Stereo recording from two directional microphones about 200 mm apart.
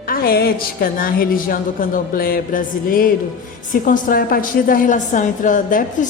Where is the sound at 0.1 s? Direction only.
50° left (ahead or behind).